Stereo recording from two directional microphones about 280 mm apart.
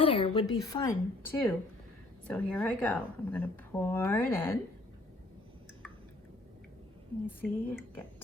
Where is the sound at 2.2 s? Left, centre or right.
Centre.